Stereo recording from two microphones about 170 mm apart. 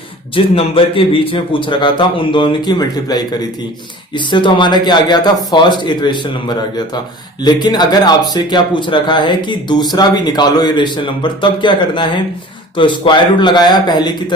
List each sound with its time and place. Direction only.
0.3 s a man's voice: 30° left (ahead or behind)